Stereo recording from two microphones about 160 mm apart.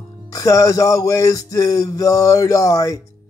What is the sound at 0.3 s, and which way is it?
Speech, 20° left (ahead or behind).